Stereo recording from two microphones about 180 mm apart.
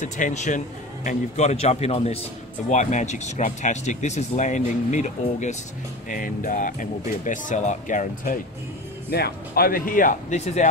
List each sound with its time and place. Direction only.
0.0 s speech: 40° left (ahead or behind)
9.1 s speech: 60° left (ahead or behind); by 10.7 s 40° left (ahead or behind)